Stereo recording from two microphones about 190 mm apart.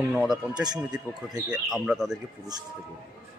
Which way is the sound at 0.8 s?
5° right (ahead or behind).